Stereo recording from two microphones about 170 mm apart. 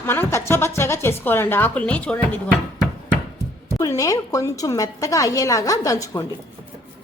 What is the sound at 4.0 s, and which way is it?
A woman's voice, 20° left (ahead or behind).